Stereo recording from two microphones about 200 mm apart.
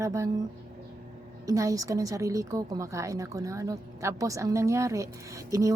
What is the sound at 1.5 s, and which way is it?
A woman's voice, 15° right (ahead or behind).